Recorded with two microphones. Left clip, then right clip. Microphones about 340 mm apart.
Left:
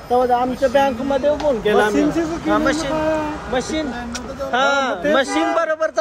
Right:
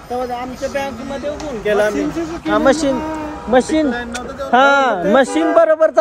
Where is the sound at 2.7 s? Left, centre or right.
Centre.